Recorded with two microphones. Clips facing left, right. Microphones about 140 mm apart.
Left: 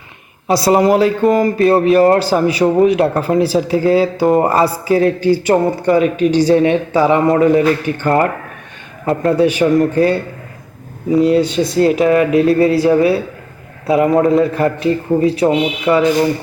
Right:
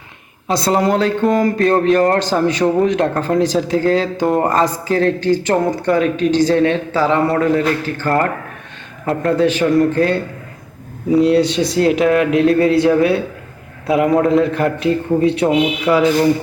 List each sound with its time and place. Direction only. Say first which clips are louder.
0.4 s speech: left 4 dB; 10° left (ahead or behind)
9.0 s a man's voice: left 2 dB; 5° left (ahead or behind)